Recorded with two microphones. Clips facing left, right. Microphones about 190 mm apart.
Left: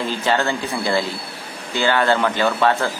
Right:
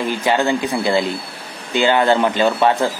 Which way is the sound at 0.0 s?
15° right (ahead or behind).